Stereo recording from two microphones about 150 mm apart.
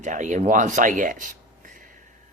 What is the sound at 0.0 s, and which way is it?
Speech, 55° right (ahead or behind).